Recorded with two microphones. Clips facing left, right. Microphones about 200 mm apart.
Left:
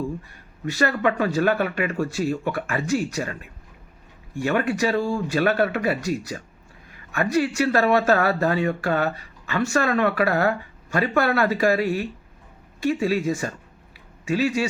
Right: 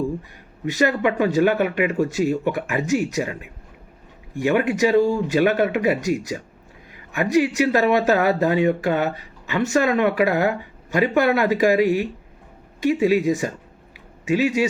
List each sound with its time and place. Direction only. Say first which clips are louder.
0.6 s speech: right 2 dB; 15° right (ahead or behind)